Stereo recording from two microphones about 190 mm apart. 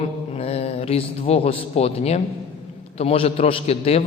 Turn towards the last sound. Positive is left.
turn(degrees=30)  # may be behind; listen again after turning